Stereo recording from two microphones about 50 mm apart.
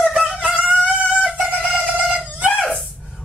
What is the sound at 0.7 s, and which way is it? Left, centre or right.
Chicken, right.